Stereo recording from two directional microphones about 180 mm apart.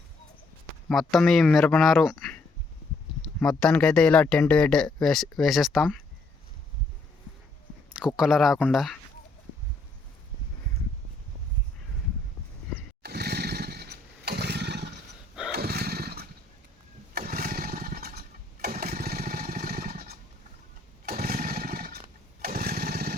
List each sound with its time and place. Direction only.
0.9 s speech: centre (ahead or behind)
3.6 s speech: 5° left (ahead or behind)
7.9 s speech: 5° right (ahead or behind)
13.0 s motorcycle: 65° right (ahead or behind)
15.5 s a sound: 60° right (ahead or behind)
17.2 s lawn mower: 55° right (ahead or behind)
19.2 s motorcycle: 55° right (ahead or behind)
21.1 s a sound: 55° right (ahead or behind)